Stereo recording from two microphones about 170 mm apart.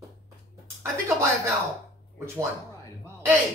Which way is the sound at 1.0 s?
15° right (ahead or behind).